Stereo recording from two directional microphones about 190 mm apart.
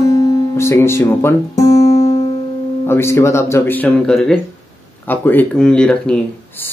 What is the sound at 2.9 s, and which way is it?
Speech, 15° left (ahead or behind).